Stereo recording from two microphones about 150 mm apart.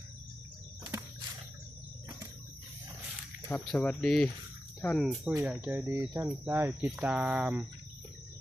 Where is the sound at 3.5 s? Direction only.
5° left (ahead or behind).